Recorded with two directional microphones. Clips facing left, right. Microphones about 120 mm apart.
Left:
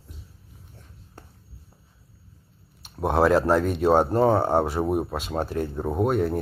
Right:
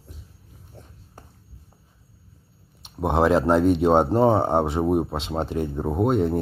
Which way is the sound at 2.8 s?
20° right (ahead or behind).